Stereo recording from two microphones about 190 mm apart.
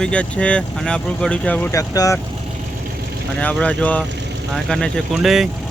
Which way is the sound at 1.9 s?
20° left (ahead or behind).